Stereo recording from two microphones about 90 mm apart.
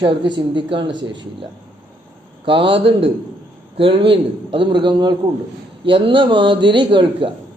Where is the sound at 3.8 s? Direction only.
85° right; by 5.1 s 55° right (ahead or behind).